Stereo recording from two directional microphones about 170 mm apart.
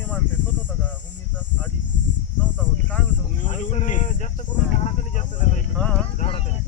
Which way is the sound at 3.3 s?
45° left (ahead or behind).